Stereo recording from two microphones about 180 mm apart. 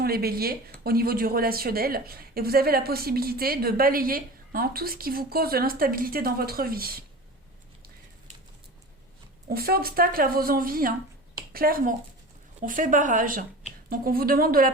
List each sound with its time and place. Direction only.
0.0 s speech: 60° right (ahead or behind)
9.5 s speech: 55° right (ahead or behind)